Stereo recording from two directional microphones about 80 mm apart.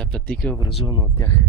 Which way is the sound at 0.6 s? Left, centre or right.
Left.